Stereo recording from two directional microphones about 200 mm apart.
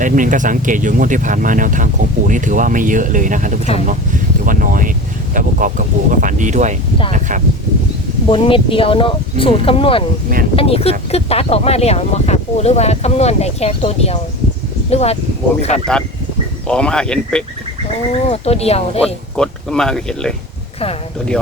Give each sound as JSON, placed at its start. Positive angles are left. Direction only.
{"t": 0.0, "sound": "speech", "side_deg": -40}
{"t": 8.3, "sound": "speech", "side_deg": 25}
{"t": 16.6, "sound": "speech", "side_deg": 5}
{"t": 18.1, "sound": "speech", "side_deg": 30}
{"t": 19.0, "sound": "speech", "side_deg": 5}